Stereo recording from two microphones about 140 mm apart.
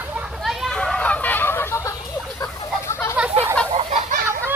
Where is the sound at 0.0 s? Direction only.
15° right (ahead or behind).